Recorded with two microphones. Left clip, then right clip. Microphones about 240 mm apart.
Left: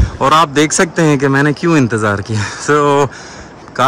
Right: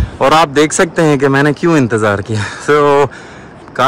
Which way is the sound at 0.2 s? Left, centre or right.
Centre.